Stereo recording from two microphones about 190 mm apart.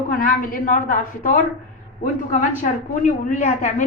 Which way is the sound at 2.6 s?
45° left (ahead or behind).